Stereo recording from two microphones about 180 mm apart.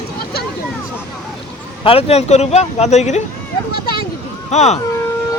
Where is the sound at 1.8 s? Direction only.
35° left (ahead or behind).